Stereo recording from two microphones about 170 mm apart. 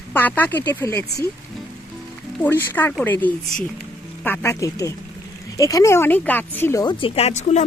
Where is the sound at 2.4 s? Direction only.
10° left (ahead or behind).